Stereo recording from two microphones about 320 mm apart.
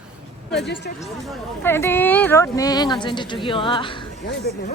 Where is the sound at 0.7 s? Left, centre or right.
Left.